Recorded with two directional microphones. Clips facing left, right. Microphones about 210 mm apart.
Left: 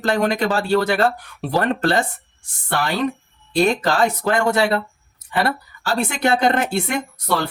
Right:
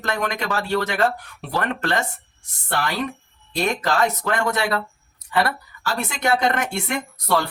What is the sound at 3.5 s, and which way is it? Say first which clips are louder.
Speech: left 5 dB; 30° left (ahead or behind).